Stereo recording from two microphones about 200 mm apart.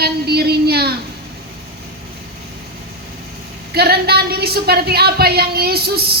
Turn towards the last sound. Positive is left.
turn(degrees=-50)  # may be behind; listen again after turning